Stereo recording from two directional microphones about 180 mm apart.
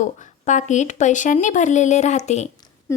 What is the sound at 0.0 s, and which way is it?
A woman's voice, 40° left (ahead or behind).